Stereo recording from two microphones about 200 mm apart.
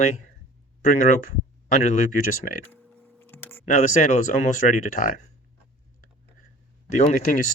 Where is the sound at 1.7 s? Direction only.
35° left (ahead or behind).